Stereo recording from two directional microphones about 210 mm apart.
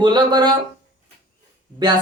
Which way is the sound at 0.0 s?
20° right (ahead or behind).